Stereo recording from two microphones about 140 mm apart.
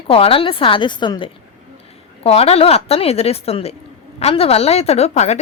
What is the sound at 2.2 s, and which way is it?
A woman's voice, 45° left (ahead or behind).